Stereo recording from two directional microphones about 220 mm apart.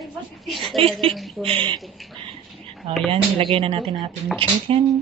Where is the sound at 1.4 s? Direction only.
25° right (ahead or behind).